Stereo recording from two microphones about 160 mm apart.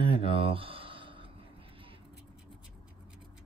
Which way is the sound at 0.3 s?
35° right (ahead or behind).